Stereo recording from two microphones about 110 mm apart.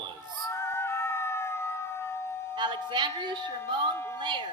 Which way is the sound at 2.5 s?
45° right (ahead or behind).